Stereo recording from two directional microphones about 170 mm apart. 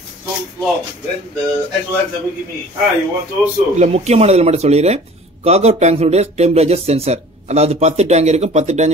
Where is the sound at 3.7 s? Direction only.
40° right (ahead or behind).